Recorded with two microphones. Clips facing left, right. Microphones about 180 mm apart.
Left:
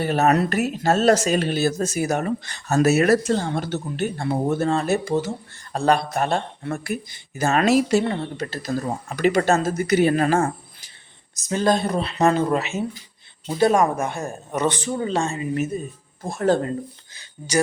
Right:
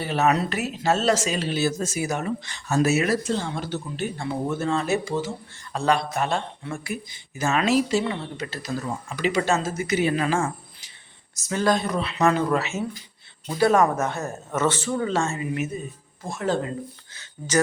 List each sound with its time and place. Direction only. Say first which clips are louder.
0.0 s speech: left 3 dB; 50° left (ahead or behind)
2.1 s speech: left 4 dB; 40° left (ahead or behind)
3.0 s speech: left 5 dB; 55° left (ahead or behind)
4.0 s speech: left 5 dB; 40° left (ahead or behind)
5.0 s speech: left 4 dB; 60° left (ahead or behind)
5.7 s a man's voice: left 3 dB; 40° left (ahead or behind)
6.1 s speech: left 3 dB; 50° left (ahead or behind)
7.3 s speech: left 3 dB; 40° left (ahead or behind)
9.1 s speech: left 4 dB; 50° left (ahead or behind)
11.4 s speech: left 2 dB; 25° left (ahead or behind)
16.3 s speech: left 5 dB; 40° left (ahead or behind)
17.2 s speech: even; 10° left (ahead or behind)